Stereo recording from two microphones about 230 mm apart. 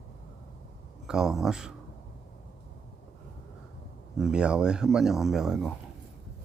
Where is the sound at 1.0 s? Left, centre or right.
Centre.